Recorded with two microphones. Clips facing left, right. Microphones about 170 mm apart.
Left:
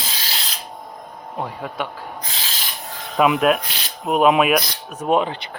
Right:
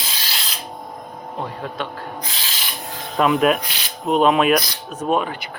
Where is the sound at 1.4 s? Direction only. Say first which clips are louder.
Left 1 dB; 10° left (ahead or behind).